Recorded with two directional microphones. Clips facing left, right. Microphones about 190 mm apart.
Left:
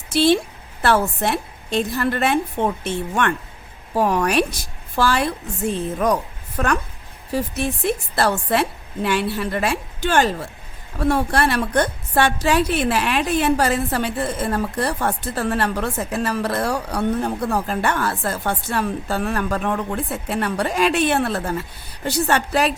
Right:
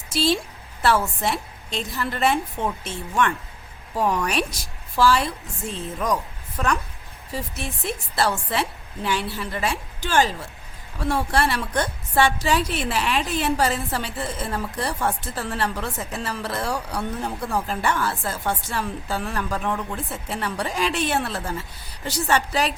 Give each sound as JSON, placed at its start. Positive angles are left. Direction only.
{"t": 0.1, "sound": "a woman's voice", "side_deg": 60}